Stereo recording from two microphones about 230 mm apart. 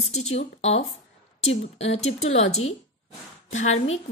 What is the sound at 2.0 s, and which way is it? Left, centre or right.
Speech, left.